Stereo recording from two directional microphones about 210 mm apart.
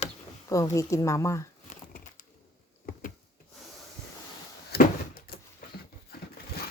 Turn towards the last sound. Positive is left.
turn(degrees=50)  # may be behind; listen again after turning